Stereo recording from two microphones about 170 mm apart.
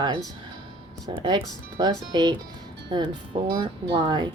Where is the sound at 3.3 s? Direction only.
25° right (ahead or behind).